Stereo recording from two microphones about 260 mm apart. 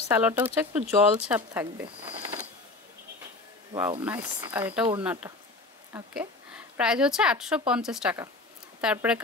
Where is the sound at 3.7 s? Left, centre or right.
Centre.